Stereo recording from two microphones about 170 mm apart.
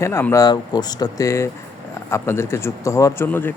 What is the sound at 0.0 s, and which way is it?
Speech, 15° left (ahead or behind).